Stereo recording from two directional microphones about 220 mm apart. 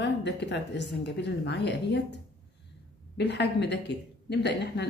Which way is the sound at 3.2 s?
50° left (ahead or behind).